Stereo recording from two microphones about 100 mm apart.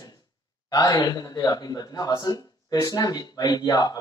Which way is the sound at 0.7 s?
40° left (ahead or behind).